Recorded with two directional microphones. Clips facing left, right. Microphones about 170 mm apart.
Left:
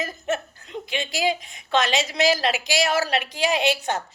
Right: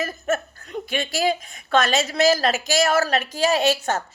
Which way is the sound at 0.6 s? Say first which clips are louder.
Right 3 dB; 20° left (ahead or behind).